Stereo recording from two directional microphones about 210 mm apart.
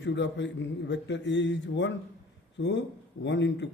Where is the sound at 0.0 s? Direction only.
60° left (ahead or behind).